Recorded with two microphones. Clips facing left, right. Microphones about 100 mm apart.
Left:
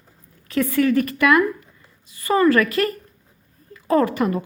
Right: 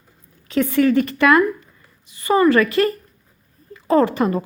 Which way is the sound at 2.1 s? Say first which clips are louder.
Right 2 dB; 20° right (ahead or behind).